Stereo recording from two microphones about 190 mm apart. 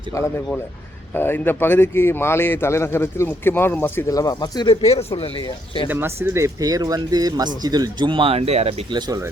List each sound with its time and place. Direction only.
1.1 s a man's voice: 10° left (ahead or behind); by 5.3 s 30° left (ahead or behind)
5.9 s speech: 10° right (ahead or behind)